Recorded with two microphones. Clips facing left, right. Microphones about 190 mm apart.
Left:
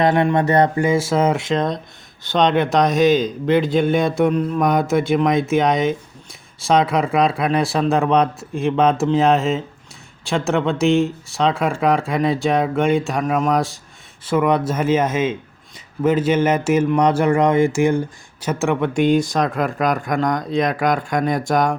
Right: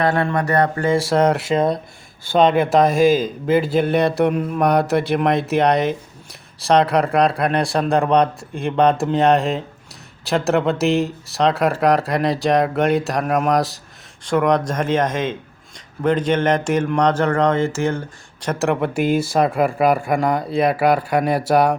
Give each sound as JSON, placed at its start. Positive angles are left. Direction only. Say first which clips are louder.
{"t": 0.0, "sound": "speech", "louder": "left 3 dB", "side_deg": 20}
{"t": 0.9, "sound": "speech", "louder": "right 1 dB", "side_deg": 0}